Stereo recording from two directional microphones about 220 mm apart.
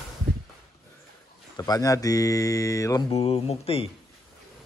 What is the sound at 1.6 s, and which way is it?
A man's voice, 15° left (ahead or behind).